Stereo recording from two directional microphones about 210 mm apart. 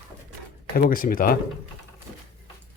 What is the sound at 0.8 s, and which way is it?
Speech, 40° left (ahead or behind).